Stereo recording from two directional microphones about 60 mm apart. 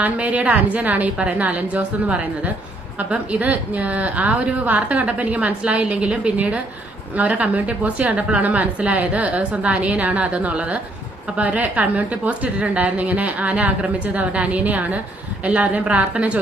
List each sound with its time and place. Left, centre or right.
0.0 s a woman's voice: right